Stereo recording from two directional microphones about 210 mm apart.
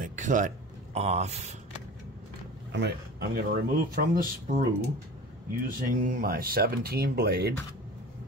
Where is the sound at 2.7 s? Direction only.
50° right (ahead or behind).